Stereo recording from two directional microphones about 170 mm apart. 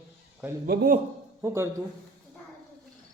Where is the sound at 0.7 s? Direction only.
65° right (ahead or behind).